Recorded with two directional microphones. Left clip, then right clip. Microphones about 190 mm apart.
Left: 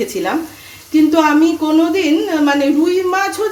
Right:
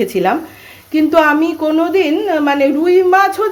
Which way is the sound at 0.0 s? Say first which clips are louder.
Right 4 dB; 55° right (ahead or behind).